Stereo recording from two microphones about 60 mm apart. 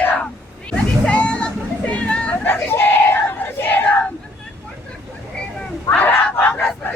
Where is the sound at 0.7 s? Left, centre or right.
Left.